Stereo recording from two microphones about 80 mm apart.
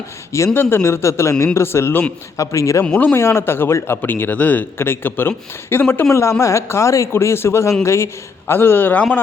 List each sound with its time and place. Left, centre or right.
0.3 s speech: left
2.4 s speech: left
3.0 s a man's voice: left